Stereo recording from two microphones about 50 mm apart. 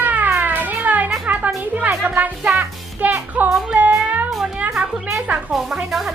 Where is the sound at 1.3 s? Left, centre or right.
Right.